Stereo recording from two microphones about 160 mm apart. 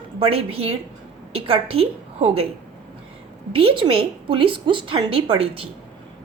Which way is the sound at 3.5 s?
35° right (ahead or behind).